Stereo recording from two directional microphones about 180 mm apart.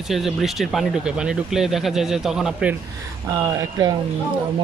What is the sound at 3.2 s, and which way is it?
Speech, 20° right (ahead or behind).